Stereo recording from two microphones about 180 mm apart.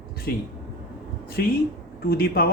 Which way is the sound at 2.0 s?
55° left (ahead or behind).